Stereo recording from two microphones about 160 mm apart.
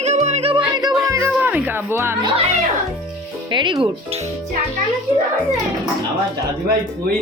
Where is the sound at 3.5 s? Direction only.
30° right (ahead or behind).